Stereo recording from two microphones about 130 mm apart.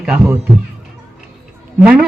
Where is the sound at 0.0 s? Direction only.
5° right (ahead or behind).